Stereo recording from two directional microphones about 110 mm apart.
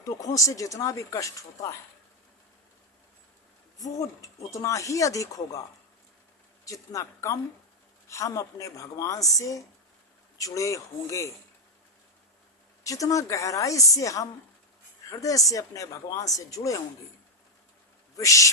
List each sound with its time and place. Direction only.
0.0 s speech: 30° left (ahead or behind)
3.8 s speech: 30° left (ahead or behind)
6.7 s a woman's voice: 30° left (ahead or behind)
12.8 s a woman's voice: 30° left (ahead or behind)
18.2 s a woman's voice: 30° left (ahead or behind)